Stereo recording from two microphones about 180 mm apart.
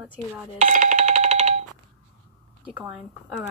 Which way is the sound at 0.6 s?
40° right (ahead or behind).